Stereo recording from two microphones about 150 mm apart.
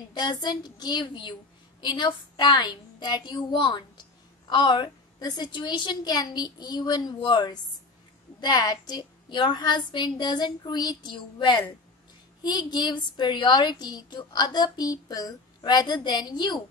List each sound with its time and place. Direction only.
0.1 s a woman's voice: 30° left (ahead or behind)